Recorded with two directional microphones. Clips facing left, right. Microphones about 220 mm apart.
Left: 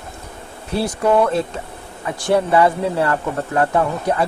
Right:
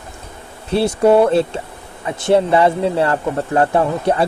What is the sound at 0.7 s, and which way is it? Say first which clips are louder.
Speech: right 5 dB; 25° right (ahead or behind).